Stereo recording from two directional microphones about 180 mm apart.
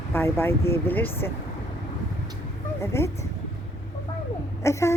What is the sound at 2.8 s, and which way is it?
Speech, 15° left (ahead or behind).